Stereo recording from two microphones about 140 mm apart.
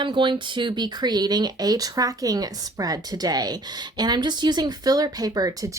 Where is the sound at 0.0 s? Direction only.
35° right (ahead or behind).